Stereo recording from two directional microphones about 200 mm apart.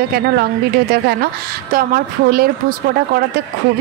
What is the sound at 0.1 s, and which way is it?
Speech, 50° right (ahead or behind).